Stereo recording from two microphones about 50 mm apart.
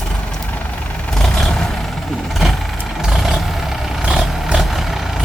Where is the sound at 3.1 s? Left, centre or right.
Centre.